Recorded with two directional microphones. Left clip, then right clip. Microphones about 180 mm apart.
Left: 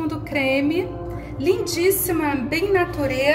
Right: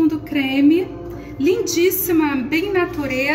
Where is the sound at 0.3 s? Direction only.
35° left (ahead or behind).